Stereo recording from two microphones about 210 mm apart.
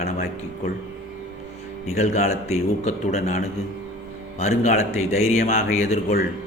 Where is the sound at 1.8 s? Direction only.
30° left (ahead or behind).